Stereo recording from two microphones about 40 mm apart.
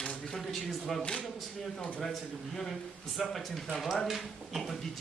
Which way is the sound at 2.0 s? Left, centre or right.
Centre.